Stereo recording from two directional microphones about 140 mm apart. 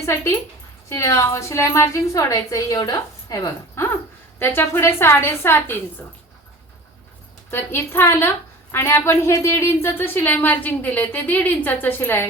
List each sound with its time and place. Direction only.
0.0 s a woman's voice: 20° left (ahead or behind)
7.5 s speech: 15° left (ahead or behind)